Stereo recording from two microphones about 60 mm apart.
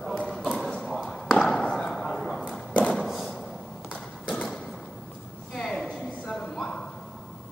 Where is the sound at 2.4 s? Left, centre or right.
Left.